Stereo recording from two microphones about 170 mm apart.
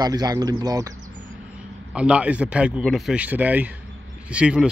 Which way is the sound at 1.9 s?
5° right (ahead or behind).